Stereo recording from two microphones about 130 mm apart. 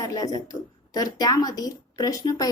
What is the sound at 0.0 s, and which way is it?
A woman's voice, 30° left (ahead or behind).